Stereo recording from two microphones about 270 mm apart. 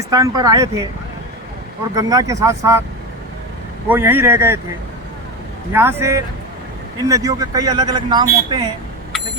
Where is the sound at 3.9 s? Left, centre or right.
Centre.